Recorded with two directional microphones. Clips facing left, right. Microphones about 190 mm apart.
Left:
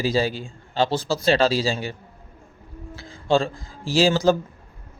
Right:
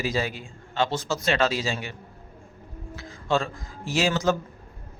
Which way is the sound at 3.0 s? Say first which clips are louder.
Left 5 dB; 30° left (ahead or behind).